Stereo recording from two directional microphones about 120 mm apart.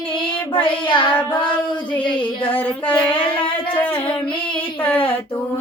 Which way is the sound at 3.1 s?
45° left (ahead or behind).